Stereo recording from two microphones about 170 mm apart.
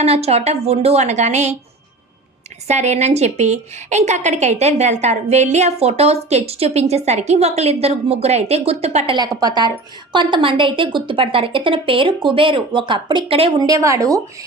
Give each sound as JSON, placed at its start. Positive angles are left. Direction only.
{"t": 0.0, "sound": "a woman's voice", "side_deg": -35}
{"t": 2.6, "sound": "a woman's voice", "side_deg": -40}
{"t": 9.1, "sound": "a woman's voice", "side_deg": -25}
{"t": 13.6, "sound": "a woman's voice", "side_deg": -20}